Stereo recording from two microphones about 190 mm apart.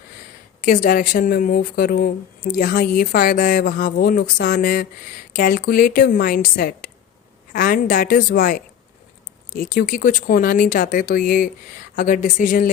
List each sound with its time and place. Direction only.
0.6 s speech: 45° left (ahead or behind)